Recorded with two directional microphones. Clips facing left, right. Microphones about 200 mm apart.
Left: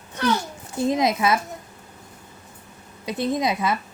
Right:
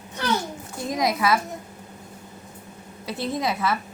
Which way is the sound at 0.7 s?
25° left (ahead or behind).